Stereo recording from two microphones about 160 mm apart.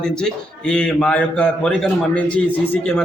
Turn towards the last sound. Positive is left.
turn(degrees=5)  # may be behind; listen again after turning